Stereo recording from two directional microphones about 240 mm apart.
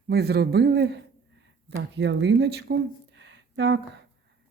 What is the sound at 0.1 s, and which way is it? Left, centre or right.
Speech, right.